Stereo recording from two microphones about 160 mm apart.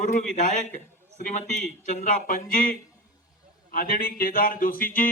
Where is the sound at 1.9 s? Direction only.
55° left (ahead or behind).